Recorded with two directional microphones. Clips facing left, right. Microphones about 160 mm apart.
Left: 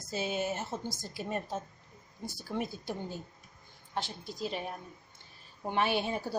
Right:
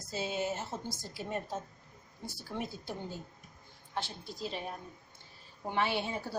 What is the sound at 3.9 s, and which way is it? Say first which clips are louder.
Speech: left 2 dB; 15° left (ahead or behind).